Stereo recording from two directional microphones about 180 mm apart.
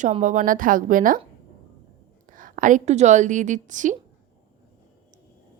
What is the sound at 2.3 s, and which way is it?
A woman's voice, 50° right (ahead or behind).